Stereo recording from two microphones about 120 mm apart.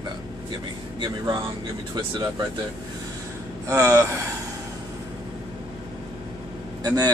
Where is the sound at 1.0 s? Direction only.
40° right (ahead or behind).